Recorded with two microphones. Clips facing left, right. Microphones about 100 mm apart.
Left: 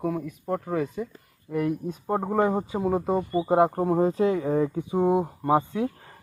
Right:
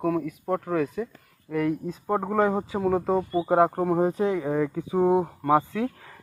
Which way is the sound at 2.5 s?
Centre (ahead or behind).